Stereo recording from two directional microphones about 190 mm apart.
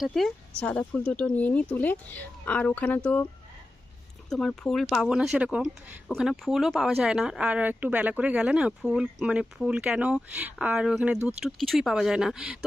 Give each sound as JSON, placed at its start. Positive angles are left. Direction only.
{"t": 0.0, "sound": "speech", "side_deg": 0}
{"t": 4.3, "sound": "speech", "side_deg": 5}